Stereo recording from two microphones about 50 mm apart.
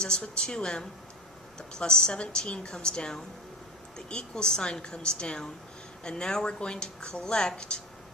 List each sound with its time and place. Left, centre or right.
0.0 s speech: centre